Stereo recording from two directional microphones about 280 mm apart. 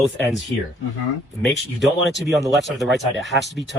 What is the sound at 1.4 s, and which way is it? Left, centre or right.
Speech, centre.